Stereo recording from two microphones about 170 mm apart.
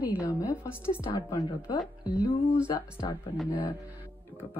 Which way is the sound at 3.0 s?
25° left (ahead or behind).